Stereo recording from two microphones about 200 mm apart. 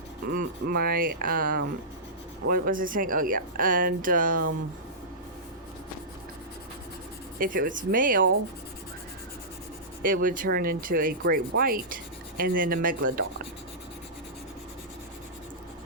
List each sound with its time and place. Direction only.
0.3 s speech: 50° right (ahead or behind)
7.3 s speech: 45° right (ahead or behind)
10.1 s speech: 45° right (ahead or behind)